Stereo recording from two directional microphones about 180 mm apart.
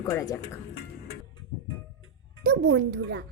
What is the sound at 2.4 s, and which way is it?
Speech, 65° right (ahead or behind).